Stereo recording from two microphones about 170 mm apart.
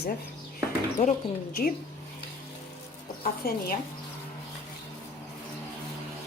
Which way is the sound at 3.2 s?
60° left (ahead or behind).